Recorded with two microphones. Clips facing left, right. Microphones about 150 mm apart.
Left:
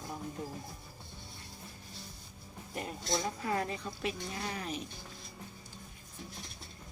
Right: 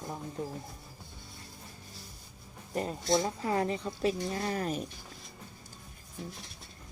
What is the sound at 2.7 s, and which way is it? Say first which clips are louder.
Speech: right 7 dB; 35° right (ahead or behind).